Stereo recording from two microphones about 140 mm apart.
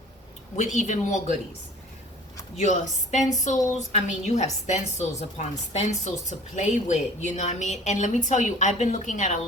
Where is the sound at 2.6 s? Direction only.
60° left (ahead or behind).